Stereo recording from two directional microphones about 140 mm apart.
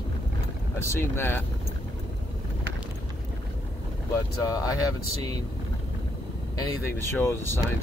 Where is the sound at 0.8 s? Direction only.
15° left (ahead or behind).